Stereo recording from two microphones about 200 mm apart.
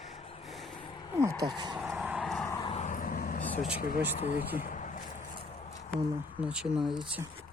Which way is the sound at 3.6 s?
30° left (ahead or behind).